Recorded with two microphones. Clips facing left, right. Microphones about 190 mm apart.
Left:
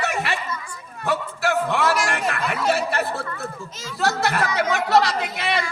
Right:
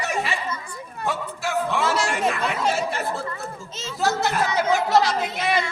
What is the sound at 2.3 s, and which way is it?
Chatter, 65° left (ahead or behind).